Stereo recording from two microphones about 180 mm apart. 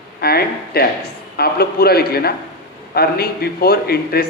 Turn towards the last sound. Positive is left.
turn(degrees=60)  # may be behind; listen again after turning